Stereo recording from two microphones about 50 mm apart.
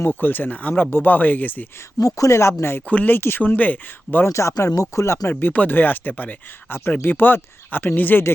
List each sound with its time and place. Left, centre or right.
0.1 s speech: left
2.0 s speech: left
2.8 s speech: left
3.2 s speech: left
3.4 s speech: left
4.3 s speech: left
5.3 s speech: left